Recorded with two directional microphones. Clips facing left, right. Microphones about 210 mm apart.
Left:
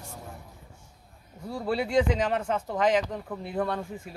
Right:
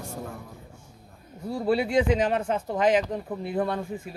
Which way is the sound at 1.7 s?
5° right (ahead or behind).